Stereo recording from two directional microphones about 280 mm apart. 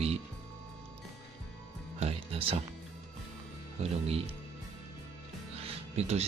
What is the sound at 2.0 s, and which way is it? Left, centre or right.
Music, right.